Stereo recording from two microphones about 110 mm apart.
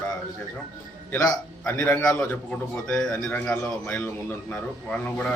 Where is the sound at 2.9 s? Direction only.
5° left (ahead or behind).